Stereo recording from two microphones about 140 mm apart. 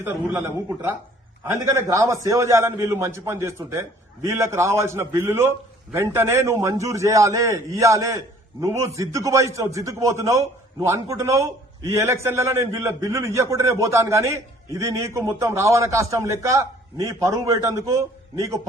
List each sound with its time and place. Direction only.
0.0 s a man's voice: 15° right (ahead or behind)